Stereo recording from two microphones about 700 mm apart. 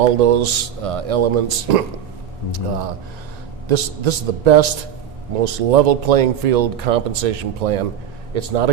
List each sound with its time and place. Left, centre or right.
0.0 s speech: right
3.7 s a man's voice: right